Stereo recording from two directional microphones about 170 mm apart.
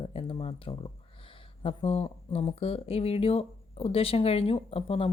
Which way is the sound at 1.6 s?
35° left (ahead or behind).